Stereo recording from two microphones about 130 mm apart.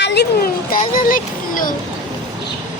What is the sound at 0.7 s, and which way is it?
Speech, 90° left.